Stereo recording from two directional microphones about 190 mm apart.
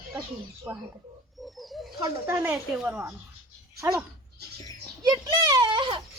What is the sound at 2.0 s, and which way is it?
Speech, 10° right (ahead or behind).